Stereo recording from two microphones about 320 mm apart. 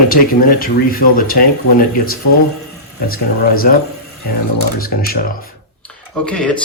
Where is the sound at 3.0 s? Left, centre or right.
Left.